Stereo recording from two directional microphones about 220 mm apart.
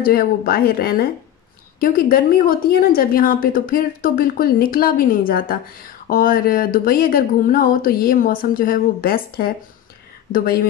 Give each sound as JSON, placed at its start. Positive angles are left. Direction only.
{"t": 0.0, "sound": "a woman's voice", "side_deg": 40}